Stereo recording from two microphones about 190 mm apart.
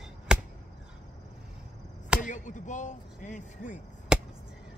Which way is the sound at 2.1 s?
40° left (ahead or behind).